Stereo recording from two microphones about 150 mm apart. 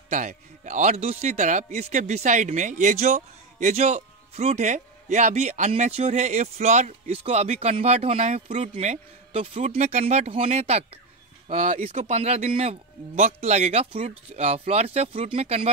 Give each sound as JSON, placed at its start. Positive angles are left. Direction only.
{"t": 0.1, "sound": "speech", "side_deg": -55}